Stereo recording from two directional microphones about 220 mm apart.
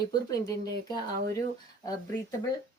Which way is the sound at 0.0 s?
15° left (ahead or behind).